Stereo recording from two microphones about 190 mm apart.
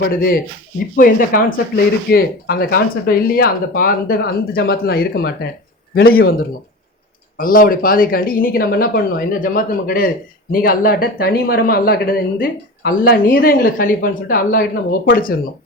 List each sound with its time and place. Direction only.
0.2 s speech: 50° left (ahead or behind)
7.3 s speech: 45° left (ahead or behind)